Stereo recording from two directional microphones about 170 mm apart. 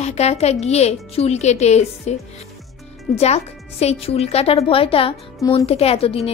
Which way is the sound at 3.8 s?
35° left (ahead or behind).